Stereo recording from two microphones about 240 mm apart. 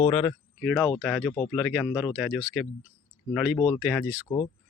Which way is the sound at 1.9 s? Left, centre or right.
Centre.